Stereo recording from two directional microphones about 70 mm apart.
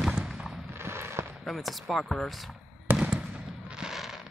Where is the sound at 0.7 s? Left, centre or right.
Right.